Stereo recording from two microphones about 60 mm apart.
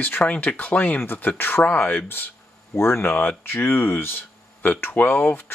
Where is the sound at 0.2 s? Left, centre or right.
Left.